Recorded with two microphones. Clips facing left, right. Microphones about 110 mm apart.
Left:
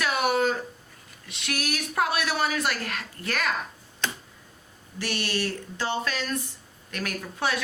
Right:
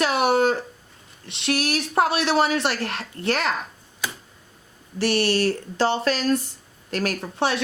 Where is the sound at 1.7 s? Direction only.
30° right (ahead or behind).